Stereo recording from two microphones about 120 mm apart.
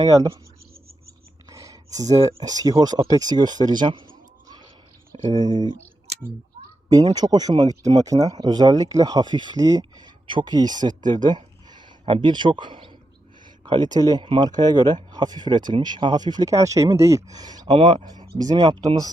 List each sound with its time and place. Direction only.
1.5 s speech: 30° right (ahead or behind)
4.4 s a sound: 35° right (ahead or behind)
5.4 s speech: 35° right (ahead or behind)
6.9 s speech: 35° right (ahead or behind)